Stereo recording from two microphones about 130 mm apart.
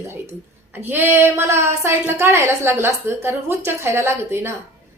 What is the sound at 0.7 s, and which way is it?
A woman's voice, 15° right (ahead or behind).